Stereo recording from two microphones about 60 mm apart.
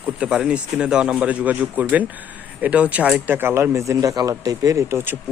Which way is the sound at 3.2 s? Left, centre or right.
Right.